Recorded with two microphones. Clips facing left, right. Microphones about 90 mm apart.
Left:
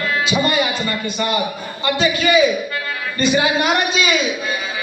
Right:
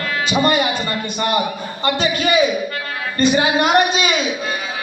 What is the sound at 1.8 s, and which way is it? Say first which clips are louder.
A man's voice: left 1 dB; 45° right (ahead or behind).